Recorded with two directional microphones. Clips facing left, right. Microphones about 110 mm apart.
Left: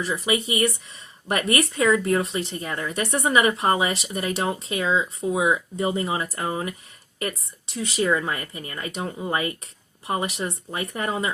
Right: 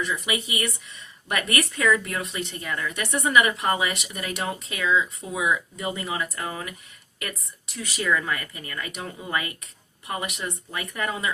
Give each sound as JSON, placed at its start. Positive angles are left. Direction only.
{"t": 0.0, "sound": "speech", "side_deg": 35}